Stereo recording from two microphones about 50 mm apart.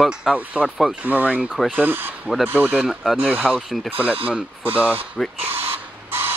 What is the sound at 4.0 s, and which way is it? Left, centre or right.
Speech, right.